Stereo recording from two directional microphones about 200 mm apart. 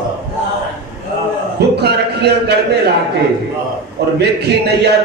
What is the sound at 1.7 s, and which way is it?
Speech, 55° right (ahead or behind).